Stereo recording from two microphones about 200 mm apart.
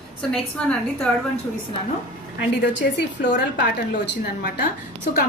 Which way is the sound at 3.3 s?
55° left (ahead or behind).